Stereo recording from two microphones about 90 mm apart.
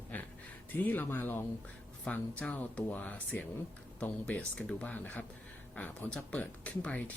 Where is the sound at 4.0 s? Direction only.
15° left (ahead or behind).